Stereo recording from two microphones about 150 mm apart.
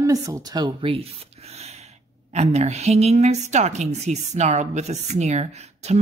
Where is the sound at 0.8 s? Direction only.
40° right (ahead or behind).